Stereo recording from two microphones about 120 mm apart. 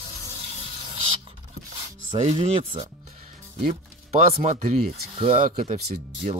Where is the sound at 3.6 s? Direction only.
50° right (ahead or behind).